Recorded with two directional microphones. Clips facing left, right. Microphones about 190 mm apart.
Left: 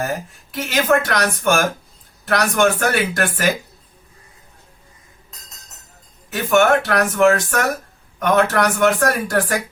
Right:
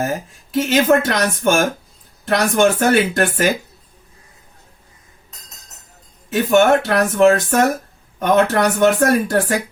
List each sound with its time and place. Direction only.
0.5 s speech: 25° right (ahead or behind)
6.5 s speech: 25° right (ahead or behind)